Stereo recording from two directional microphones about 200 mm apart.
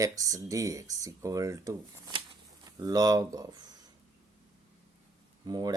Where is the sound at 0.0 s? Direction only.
15° right (ahead or behind).